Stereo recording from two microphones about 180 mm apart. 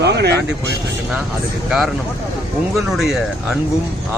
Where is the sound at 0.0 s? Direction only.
65° right (ahead or behind).